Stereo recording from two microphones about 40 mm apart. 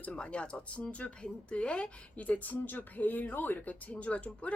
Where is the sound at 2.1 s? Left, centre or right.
Left.